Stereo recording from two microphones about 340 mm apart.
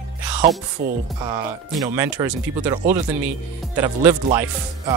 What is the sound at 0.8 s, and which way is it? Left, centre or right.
Speech, right.